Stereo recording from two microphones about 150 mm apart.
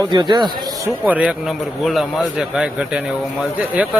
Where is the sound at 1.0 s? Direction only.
10° right (ahead or behind).